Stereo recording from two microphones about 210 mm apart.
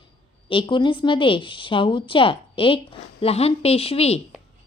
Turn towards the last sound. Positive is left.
turn(degrees=30)  # may be behind; listen again after turning